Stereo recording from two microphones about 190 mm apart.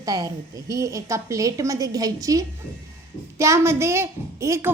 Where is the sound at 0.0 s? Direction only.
20° right (ahead or behind).